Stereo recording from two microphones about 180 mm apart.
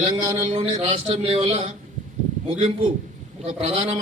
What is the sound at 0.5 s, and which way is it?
A man's voice, 35° right (ahead or behind).